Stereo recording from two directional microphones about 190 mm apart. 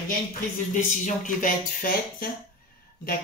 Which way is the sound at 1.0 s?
45° left (ahead or behind).